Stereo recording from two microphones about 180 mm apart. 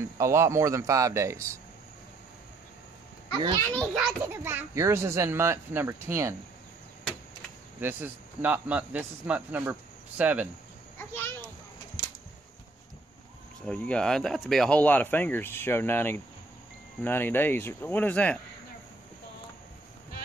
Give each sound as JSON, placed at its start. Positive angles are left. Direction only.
{"t": 0.0, "sound": "speech", "side_deg": -15}
{"t": 3.9, "sound": "speech", "side_deg": -10}
{"t": 7.8, "sound": "speech", "side_deg": -10}
{"t": 11.0, "sound": "a child's voice", "side_deg": 15}
{"t": 13.7, "sound": "speech", "side_deg": 5}